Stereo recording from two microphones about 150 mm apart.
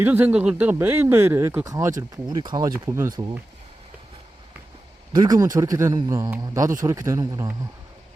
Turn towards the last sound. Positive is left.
turn(degrees=-25)  # may be behind; listen again after turning